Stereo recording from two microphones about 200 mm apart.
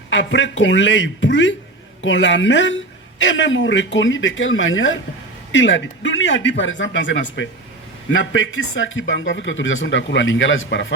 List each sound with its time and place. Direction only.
0.1 s speech: 70° left (ahead or behind)